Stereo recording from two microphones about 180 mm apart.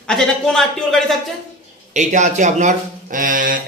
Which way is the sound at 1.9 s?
40° right (ahead or behind).